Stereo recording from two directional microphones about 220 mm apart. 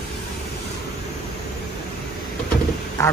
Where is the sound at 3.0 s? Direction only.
15° left (ahead or behind).